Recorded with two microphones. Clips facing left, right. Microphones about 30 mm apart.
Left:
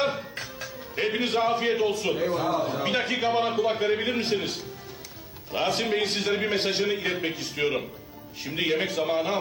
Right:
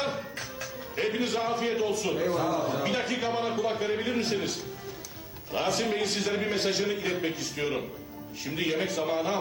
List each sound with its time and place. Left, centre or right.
1.0 s a man's voice: left